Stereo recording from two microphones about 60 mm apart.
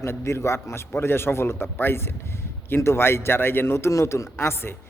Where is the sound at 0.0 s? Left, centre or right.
Left.